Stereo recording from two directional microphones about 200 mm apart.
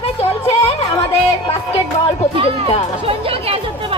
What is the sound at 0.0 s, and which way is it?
Music, 30° left (ahead or behind).